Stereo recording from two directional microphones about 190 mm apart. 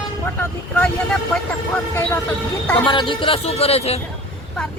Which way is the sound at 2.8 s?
25° left (ahead or behind).